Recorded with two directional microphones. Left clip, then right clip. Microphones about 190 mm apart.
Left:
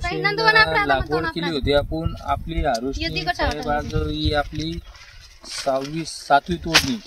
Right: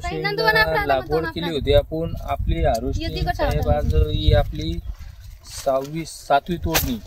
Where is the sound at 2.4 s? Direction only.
45° right (ahead or behind).